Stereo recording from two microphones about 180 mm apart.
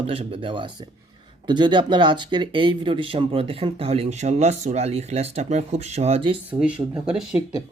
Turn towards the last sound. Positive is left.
turn(degrees=-5)  # may be behind; listen again after turning